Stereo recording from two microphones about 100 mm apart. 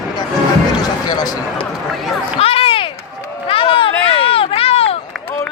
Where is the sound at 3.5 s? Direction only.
65° left (ahead or behind).